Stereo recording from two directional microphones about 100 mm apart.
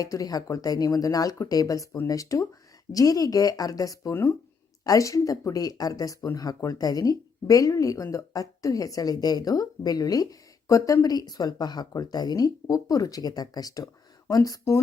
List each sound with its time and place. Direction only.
0.0 s speech: 35° left (ahead or behind)
4.1 s speech: 25° left (ahead or behind)